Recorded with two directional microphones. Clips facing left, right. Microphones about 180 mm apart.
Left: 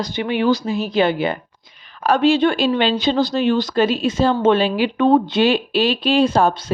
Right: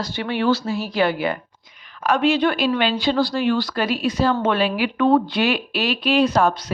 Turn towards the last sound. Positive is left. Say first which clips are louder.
# left 2 dB
turn(degrees=30)  # may be behind; listen again after turning